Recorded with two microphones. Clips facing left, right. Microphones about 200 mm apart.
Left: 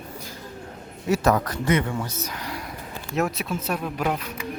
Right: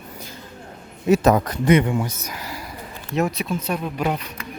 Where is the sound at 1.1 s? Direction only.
20° right (ahead or behind).